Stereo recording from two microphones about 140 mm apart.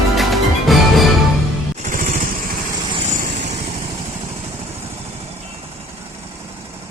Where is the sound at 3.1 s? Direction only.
60° right (ahead or behind).